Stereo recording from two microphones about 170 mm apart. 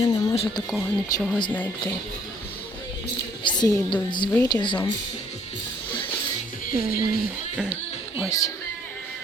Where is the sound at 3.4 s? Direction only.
25° left (ahead or behind).